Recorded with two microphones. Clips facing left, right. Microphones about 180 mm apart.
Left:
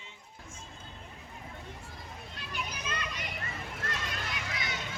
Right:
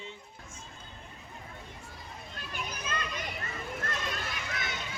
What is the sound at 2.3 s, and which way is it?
Children playing, 50° right (ahead or behind).